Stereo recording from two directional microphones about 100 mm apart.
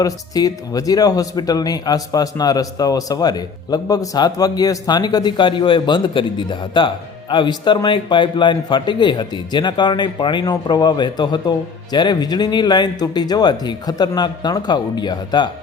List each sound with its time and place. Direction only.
0.0 s speech: 35° left (ahead or behind)